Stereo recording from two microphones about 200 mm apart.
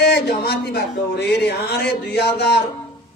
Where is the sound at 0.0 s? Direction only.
55° left (ahead or behind).